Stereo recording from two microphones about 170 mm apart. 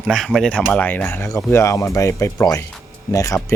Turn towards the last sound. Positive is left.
turn(degrees=20)  # may be behind; listen again after turning